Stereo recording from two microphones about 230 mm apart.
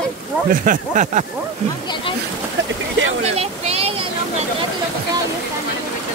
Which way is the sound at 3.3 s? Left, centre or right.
Right.